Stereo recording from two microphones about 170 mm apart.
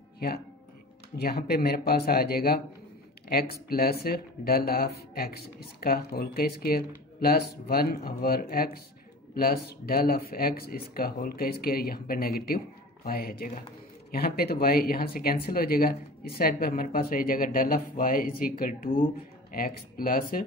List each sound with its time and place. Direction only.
1.1 s speech: 65° left (ahead or behind)